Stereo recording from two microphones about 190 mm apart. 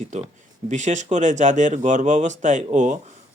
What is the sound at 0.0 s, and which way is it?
Speech, 40° right (ahead or behind).